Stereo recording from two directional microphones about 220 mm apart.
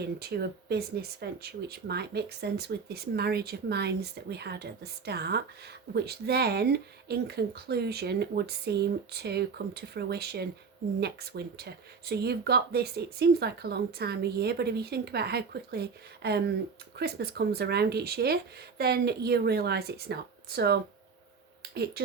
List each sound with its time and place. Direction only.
0.2 s speech: 45° right (ahead or behind)